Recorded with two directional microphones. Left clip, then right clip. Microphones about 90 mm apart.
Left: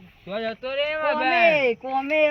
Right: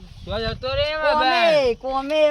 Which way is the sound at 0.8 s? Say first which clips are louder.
Right 4 dB; 5° right (ahead or behind).